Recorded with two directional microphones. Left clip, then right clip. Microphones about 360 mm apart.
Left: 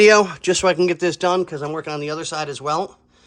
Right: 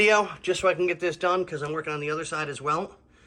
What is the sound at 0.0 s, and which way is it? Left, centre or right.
Speech, left.